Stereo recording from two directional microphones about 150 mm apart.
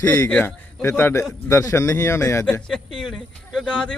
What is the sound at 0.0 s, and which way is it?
Speech, 10° left (ahead or behind).